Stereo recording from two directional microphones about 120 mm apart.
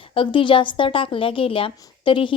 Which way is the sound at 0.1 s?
45° left (ahead or behind).